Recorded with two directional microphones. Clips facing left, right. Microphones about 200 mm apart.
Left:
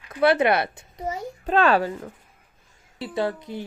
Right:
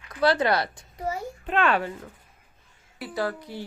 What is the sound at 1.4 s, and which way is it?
Speech, 40° left (ahead or behind).